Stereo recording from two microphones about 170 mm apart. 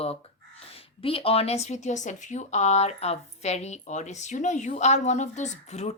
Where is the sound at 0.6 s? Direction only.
35° left (ahead or behind).